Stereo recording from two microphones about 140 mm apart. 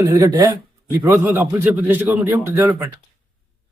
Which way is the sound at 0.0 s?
25° right (ahead or behind).